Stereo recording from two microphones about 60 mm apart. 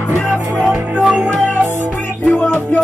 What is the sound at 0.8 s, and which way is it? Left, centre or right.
Music, right.